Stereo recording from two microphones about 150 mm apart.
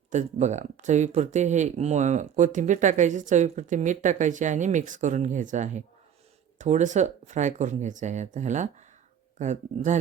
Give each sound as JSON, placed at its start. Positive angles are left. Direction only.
{"t": 0.1, "sound": "speech", "side_deg": -50}